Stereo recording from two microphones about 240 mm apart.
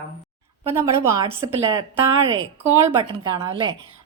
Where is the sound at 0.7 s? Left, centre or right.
Centre.